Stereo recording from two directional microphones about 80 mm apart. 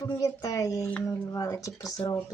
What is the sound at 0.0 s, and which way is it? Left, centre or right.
Speech, left.